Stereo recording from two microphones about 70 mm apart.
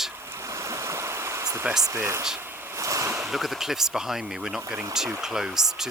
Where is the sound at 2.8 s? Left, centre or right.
Right.